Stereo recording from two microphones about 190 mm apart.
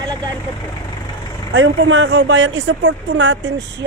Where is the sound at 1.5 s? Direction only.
80° right.